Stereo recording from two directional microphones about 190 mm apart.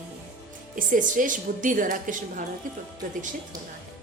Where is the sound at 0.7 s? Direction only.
45° right (ahead or behind).